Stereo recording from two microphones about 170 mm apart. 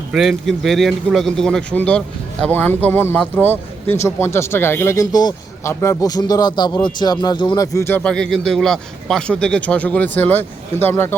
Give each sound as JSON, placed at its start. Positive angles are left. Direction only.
{"t": 0.1, "sound": "speech", "side_deg": 0}